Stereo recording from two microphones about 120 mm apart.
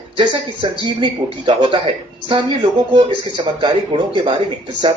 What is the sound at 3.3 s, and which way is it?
Speech, 45° right (ahead or behind).